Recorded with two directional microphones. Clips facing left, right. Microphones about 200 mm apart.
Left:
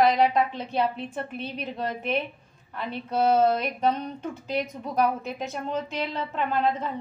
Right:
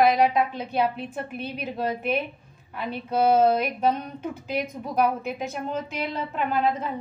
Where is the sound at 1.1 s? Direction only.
5° right (ahead or behind).